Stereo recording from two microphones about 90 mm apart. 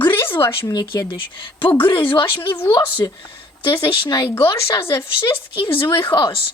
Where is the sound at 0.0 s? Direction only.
25° left (ahead or behind).